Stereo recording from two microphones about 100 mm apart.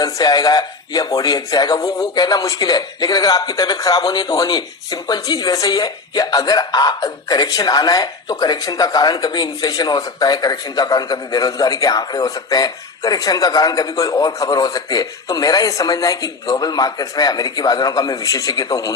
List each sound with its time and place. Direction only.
0.0 s speech: 40° left (ahead or behind)